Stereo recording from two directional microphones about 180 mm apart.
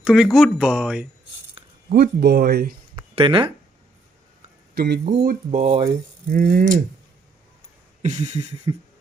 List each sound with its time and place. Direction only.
0.0 s speech: centre (ahead or behind)
1.9 s speech: 60° right (ahead or behind)
3.2 s speech: 30° right (ahead or behind)
4.7 s speech: 60° right (ahead or behind)
5.5 s speech: 35° right (ahead or behind)
8.0 s a sound: 40° right (ahead or behind)